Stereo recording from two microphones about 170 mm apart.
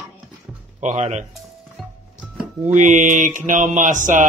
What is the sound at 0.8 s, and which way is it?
Mantra, 45° right (ahead or behind).